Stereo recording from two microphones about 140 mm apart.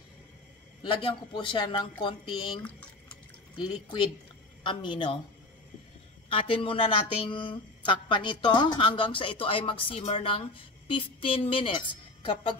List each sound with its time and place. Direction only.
0.8 s speech: 40° left (ahead or behind)
6.3 s speech: 40° left (ahead or behind)